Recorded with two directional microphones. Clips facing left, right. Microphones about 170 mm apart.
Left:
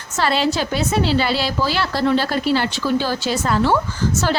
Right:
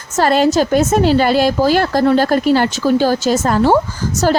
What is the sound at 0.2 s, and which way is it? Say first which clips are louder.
A woman's voice: right 7 dB; 45° right (ahead or behind).